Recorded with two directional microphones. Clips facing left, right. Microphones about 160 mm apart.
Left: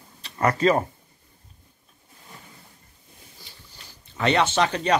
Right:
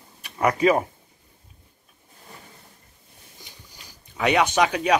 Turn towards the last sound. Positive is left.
turn(degrees=-10)  # may be behind; listen again after turning